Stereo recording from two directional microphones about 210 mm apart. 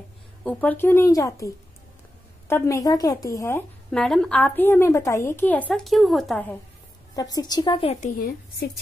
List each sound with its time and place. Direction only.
0.4 s a woman's voice: 5° left (ahead or behind)
7.2 s a woman's voice: 20° left (ahead or behind)